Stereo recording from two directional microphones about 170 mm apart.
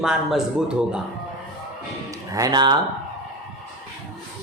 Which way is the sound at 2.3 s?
25° right (ahead or behind).